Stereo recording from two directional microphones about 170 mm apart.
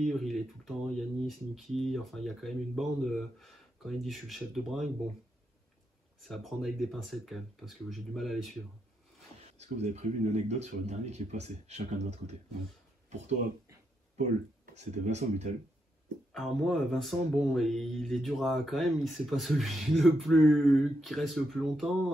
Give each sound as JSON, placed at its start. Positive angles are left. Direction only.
{"t": 0.0, "sound": "speech", "side_deg": 0}
{"t": 6.2, "sound": "speech", "side_deg": 0}
{"t": 9.5, "sound": "speech", "side_deg": -40}
{"t": 14.7, "sound": "speech", "side_deg": -40}
{"t": 16.3, "sound": "speech", "side_deg": 0}